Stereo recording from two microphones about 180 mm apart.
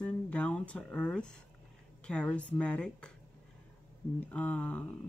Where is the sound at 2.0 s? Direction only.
5° left (ahead or behind).